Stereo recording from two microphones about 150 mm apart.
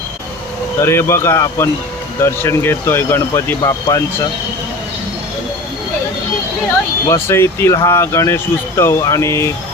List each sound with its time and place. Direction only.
0.8 s speech: 20° left (ahead or behind)
3.6 s speech: 25° left (ahead or behind)
7.1 s speech: 15° left (ahead or behind)